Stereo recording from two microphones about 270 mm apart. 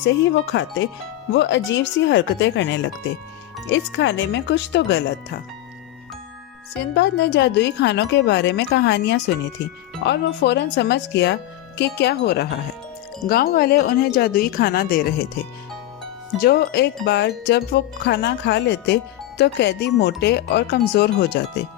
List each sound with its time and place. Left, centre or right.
0.5 s speech: left
6.9 s speech: left
16.4 s speech: left